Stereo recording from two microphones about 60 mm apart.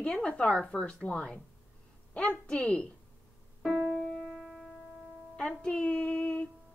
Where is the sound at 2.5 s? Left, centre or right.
Centre.